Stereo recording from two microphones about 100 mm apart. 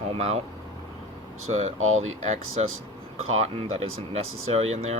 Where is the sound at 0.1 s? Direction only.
90° right.